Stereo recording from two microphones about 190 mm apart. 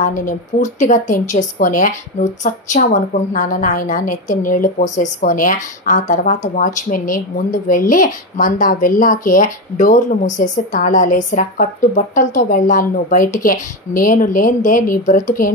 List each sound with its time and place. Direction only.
0.0 s a woman's voice: 45° left (ahead or behind)